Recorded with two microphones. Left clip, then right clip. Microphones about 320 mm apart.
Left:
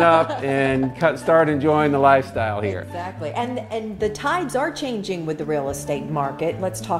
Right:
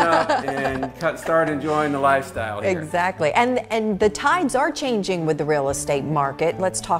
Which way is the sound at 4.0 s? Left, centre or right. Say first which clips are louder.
Right 3 dB; right.